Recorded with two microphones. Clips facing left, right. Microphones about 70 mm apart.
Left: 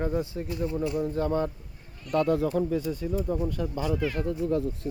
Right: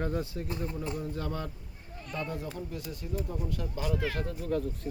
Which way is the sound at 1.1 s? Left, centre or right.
Left.